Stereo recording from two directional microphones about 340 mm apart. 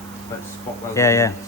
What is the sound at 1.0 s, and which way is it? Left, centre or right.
Speech, centre.